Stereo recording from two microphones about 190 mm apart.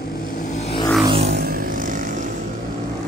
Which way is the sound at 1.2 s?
60° right (ahead or behind).